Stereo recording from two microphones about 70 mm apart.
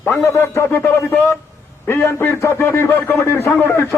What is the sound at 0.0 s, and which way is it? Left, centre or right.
A man's voice, left.